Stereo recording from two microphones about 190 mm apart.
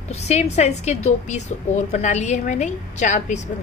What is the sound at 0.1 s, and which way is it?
A woman's voice, 35° left (ahead or behind).